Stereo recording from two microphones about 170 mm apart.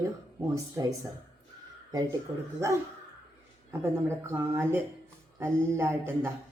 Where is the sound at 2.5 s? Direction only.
15° right (ahead or behind).